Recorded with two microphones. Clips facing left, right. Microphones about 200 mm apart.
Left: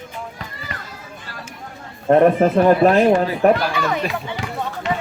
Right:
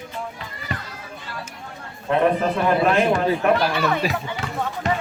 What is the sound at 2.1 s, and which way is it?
A man's voice, 45° left (ahead or behind).